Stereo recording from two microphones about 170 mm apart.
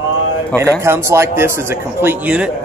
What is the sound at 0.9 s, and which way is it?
A man's voice, 15° right (ahead or behind).